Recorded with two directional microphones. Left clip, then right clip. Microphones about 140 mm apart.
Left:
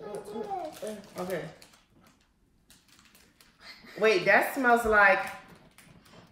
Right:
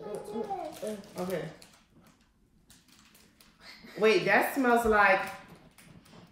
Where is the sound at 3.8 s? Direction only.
10° left (ahead or behind).